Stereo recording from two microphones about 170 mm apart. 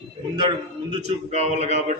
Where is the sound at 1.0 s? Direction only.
40° right (ahead or behind).